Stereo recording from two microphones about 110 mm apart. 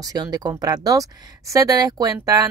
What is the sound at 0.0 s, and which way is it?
Speech, 35° right (ahead or behind).